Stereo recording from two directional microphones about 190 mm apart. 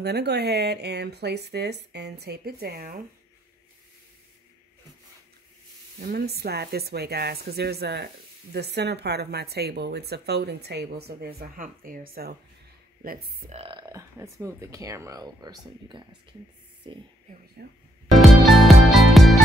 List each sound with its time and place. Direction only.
0.0 s speech: 60° right (ahead or behind)
5.9 s speech: 55° right (ahead or behind)
13.5 s speech: 30° right (ahead or behind)
17.6 s speech: 55° right (ahead or behind)
18.4 s music: centre (ahead or behind)